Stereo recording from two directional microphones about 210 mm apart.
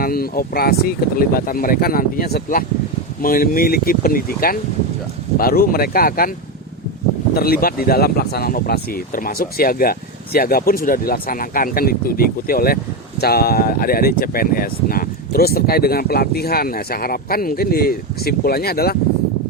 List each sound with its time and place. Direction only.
0.0 s speech: 45° left (ahead or behind)
7.3 s speech: 45° left (ahead or behind)